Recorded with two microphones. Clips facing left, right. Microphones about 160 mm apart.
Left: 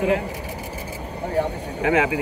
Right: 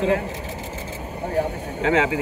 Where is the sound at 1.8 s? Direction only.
25° right (ahead or behind).